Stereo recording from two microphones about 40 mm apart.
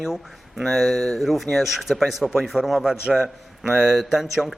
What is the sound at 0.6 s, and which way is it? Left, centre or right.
A man's voice, centre.